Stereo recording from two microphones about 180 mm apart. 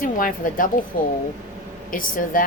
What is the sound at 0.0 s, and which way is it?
Speech, 50° left (ahead or behind).